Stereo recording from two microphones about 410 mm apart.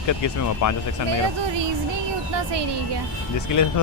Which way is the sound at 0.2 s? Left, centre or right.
Left.